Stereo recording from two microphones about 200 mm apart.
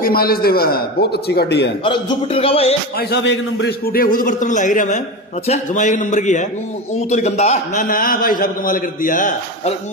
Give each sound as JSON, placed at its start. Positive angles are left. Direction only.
{"t": 0.0, "sound": "a man's voice", "side_deg": 50}
{"t": 1.9, "sound": "a man's voice", "side_deg": 25}
{"t": 3.0, "sound": "a man's voice", "side_deg": 60}
{"t": 3.8, "sound": "a man's voice", "side_deg": 45}